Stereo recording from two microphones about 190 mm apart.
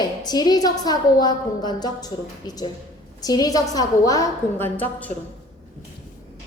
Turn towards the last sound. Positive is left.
turn(degrees=10)  # may be behind; listen again after turning